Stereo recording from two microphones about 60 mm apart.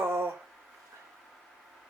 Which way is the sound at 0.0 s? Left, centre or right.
Right.